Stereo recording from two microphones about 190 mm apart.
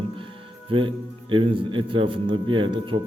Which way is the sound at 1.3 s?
25° right (ahead or behind).